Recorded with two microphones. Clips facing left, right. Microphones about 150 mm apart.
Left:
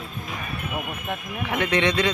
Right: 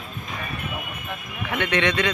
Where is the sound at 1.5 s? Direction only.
35° left (ahead or behind).